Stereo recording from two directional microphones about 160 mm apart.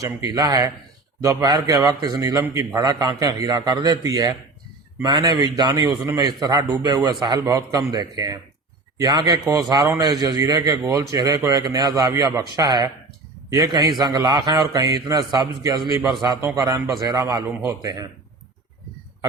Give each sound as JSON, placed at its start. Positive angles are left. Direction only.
{"t": 0.0, "sound": "a man's voice", "side_deg": -20}